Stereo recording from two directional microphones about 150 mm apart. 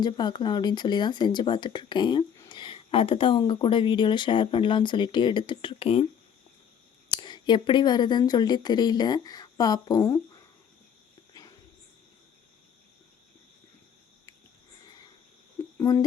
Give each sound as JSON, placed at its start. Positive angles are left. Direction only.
{"t": 0.0, "sound": "speech", "side_deg": 30}
{"t": 7.1, "sound": "speech", "side_deg": 30}
{"t": 11.3, "sound": "a sound", "side_deg": 20}
{"t": 15.8, "sound": "speech", "side_deg": 25}